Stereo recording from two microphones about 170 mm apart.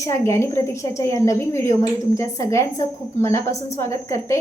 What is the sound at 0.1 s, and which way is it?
A woman's voice, 15° left (ahead or behind).